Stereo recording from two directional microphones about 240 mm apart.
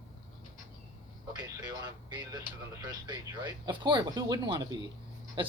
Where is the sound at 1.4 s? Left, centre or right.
Centre.